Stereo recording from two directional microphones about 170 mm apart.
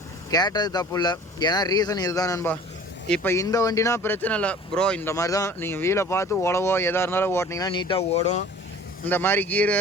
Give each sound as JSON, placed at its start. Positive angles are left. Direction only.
{"t": 0.3, "sound": "speech", "side_deg": 25}
{"t": 5.1, "sound": "speech", "side_deg": 20}
{"t": 9.0, "sound": "speech", "side_deg": 10}